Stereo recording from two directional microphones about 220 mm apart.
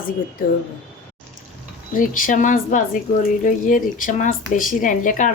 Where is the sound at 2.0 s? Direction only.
40° left (ahead or behind).